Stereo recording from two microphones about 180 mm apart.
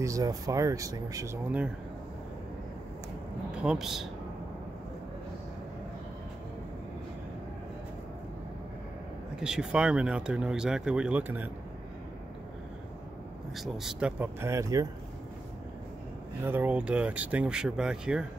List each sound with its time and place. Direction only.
0.0 s speech: 20° right (ahead or behind)
3.5 s speech: 5° right (ahead or behind)
9.4 s speech: 5° right (ahead or behind)
13.6 s speech: 5° right (ahead or behind)
16.4 s speech: 10° right (ahead or behind)